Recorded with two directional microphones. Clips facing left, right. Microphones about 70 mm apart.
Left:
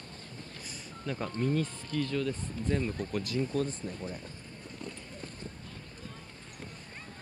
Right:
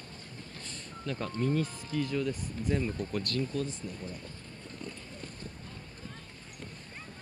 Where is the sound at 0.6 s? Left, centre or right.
Centre.